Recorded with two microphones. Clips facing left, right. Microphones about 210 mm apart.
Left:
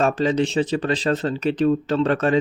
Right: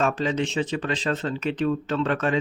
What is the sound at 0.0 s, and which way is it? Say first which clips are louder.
Speech: left 5 dB; 35° left (ahead or behind).